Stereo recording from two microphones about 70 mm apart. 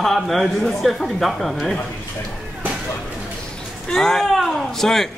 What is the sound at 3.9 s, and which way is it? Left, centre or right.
Speech, centre.